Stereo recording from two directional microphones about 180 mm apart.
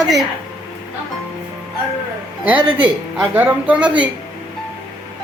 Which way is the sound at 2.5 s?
30° right (ahead or behind).